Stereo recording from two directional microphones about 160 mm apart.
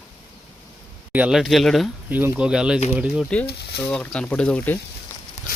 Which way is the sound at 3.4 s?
90° left.